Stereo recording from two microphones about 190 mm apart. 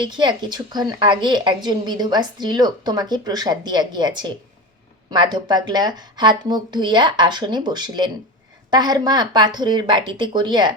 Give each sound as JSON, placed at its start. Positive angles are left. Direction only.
{"t": 0.0, "sound": "a woman's voice", "side_deg": -25}